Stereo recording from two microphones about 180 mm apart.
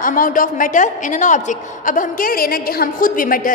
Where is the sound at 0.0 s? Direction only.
50° left (ahead or behind).